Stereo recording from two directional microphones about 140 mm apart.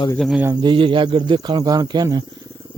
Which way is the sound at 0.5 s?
35° right (ahead or behind).